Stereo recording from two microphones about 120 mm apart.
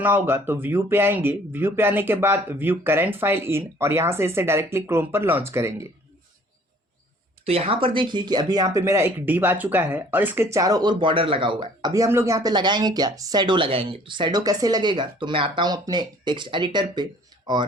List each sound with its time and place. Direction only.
0.0 s speech: 15° right (ahead or behind)
7.4 s speech: 55° right (ahead or behind)
11.9 s speech: 25° right (ahead or behind)